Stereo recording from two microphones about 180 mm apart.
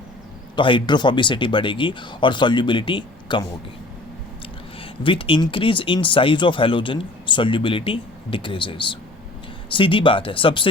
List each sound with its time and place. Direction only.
0.5 s speech: 25° left (ahead or behind)
4.8 s speech: 30° left (ahead or behind)